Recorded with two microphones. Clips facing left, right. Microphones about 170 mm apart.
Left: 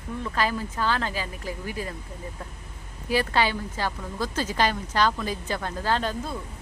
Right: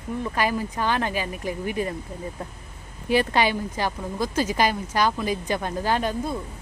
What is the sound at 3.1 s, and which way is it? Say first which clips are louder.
Speech: right 3 dB; 20° right (ahead or behind).